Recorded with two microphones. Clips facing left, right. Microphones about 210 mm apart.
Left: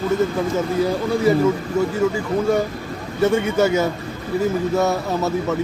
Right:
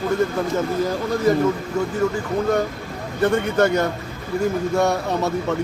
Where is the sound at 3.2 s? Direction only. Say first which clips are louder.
Left 1 dB; 5° left (ahead or behind).